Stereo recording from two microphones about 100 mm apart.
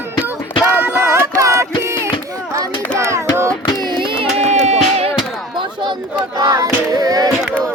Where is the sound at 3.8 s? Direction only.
55° right (ahead or behind).